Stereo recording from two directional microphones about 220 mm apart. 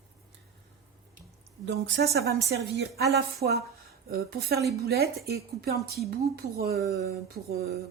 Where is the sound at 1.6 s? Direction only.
50° right (ahead or behind).